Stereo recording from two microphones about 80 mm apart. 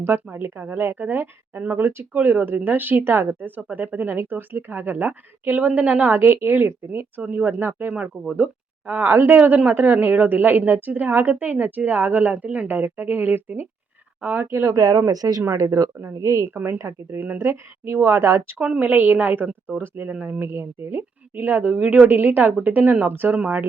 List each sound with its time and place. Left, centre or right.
0.0 s speech: right
14.8 s speech: right; by 23.6 s centre